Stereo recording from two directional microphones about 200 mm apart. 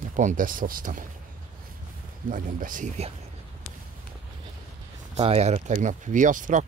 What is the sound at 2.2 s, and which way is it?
Speech, 40° right (ahead or behind).